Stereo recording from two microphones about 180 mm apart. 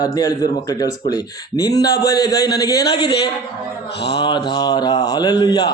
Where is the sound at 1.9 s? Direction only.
60° left (ahead or behind).